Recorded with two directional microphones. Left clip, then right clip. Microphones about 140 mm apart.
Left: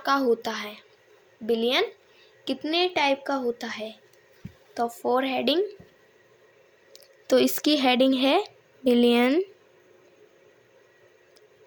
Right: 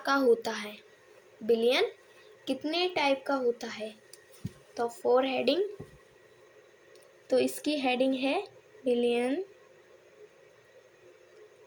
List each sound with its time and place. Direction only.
0.0 s a child's voice: 25° left (ahead or behind)
6.9 s speech: 55° left (ahead or behind)